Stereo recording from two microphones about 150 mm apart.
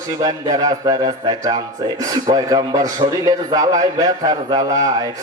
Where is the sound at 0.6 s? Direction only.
25° right (ahead or behind).